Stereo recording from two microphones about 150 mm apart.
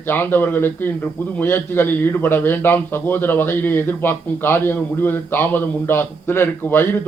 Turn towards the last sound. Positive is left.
turn(degrees=15)  # may be behind; listen again after turning